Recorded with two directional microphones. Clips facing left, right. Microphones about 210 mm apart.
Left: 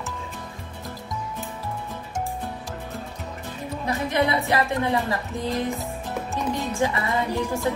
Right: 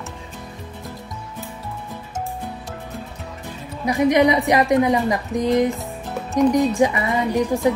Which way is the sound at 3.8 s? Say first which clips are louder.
Right 8 dB; 15° right (ahead or behind).